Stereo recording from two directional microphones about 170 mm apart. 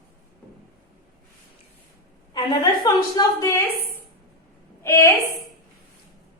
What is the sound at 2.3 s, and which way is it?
A woman's voice, 25° left (ahead or behind).